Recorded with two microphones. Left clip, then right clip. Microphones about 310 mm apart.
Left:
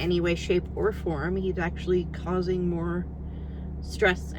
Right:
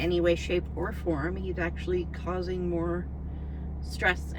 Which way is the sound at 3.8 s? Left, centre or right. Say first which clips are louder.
Left 3 dB; centre.